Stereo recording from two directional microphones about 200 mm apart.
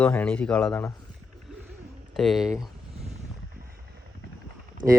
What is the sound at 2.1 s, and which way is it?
Speech, centre (ahead or behind).